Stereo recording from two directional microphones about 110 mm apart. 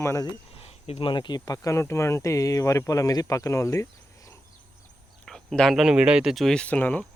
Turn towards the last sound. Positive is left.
turn(degrees=15)  # may be behind; listen again after turning